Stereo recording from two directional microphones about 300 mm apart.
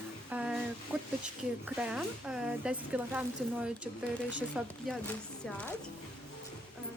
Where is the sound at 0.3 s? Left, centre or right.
Centre.